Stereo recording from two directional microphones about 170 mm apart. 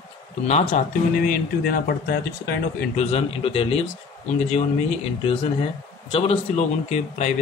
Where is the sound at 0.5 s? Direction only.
40° left (ahead or behind); by 2.9 s 70° left (ahead or behind).